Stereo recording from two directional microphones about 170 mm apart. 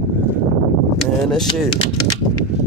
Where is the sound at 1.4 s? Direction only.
25° left (ahead or behind).